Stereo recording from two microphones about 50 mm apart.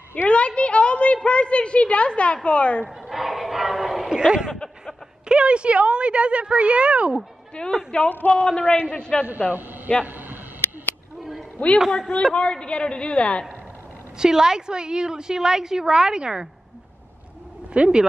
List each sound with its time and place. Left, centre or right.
0.3 s a woman's voice: left
3.1 s choir: centre
4.1 s a woman's voice: centre
5.3 s a woman's voice: right
7.6 s a woman's voice: left
8.1 s speech: left
8.4 s a woman's voice: centre
9.5 s a man's voice: right
10.0 s a sound: right
11.8 s speech: centre
12.4 s a woman's voice: left
14.1 s a woman's voice: centre
17.7 s a woman's voice: centre